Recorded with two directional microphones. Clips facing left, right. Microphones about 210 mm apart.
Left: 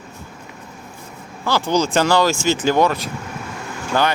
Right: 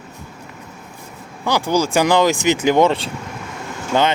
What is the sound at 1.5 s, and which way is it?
Speech, 15° right (ahead or behind).